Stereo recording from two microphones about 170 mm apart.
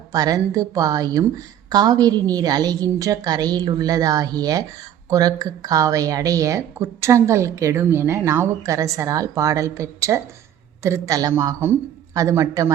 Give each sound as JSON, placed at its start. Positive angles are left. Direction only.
{"t": 0.1, "sound": "a woman's voice", "side_deg": -20}